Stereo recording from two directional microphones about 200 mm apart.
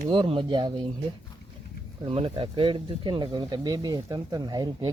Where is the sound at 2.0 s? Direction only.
25° right (ahead or behind).